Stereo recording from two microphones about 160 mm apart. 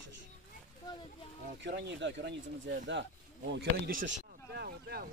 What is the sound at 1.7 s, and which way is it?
Speech, 90° right.